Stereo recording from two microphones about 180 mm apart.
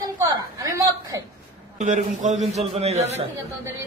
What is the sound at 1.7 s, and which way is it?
A man's voice, 40° right (ahead or behind).